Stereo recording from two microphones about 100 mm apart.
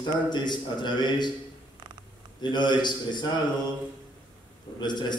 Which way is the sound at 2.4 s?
50° left (ahead or behind).